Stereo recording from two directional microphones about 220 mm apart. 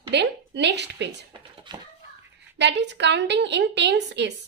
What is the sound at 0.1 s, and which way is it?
A woman's voice, 50° right (ahead or behind).